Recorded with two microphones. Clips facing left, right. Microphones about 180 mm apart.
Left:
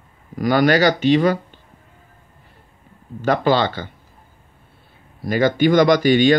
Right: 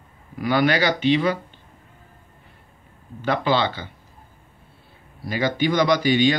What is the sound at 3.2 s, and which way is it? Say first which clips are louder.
Speech: left 4 dB; 45° left (ahead or behind).